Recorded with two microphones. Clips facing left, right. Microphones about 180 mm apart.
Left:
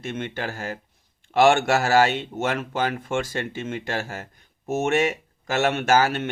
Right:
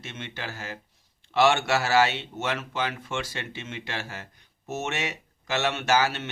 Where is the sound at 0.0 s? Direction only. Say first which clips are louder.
Left 8 dB; 50° left (ahead or behind).